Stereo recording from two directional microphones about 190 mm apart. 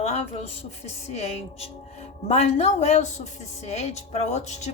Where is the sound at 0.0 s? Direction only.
35° left (ahead or behind).